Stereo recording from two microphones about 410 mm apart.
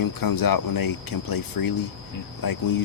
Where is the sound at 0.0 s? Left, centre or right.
Left.